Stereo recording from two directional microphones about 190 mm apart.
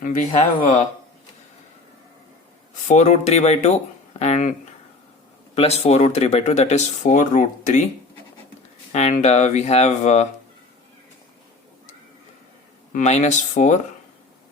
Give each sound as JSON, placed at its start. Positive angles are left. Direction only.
{"t": 0.6, "sound": "speech", "side_deg": 40}
{"t": 2.8, "sound": "speech", "side_deg": 40}
{"t": 5.5, "sound": "speech", "side_deg": 35}
{"t": 8.9, "sound": "speech", "side_deg": 35}
{"t": 12.9, "sound": "speech", "side_deg": 40}